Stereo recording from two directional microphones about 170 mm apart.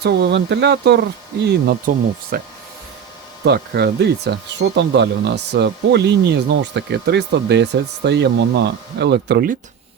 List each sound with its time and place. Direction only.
0.0 s speech: 80° right
1.9 s speech: 55° right (ahead or behind)
3.4 s speech: 75° right (ahead or behind)